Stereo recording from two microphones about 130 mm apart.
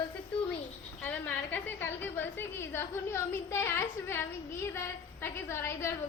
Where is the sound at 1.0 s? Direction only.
15° left (ahead or behind).